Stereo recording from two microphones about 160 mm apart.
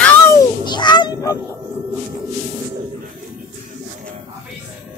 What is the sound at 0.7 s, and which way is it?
Speech, 30° left (ahead or behind).